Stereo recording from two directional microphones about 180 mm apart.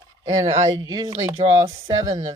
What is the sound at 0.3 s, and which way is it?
Speech, 20° right (ahead or behind).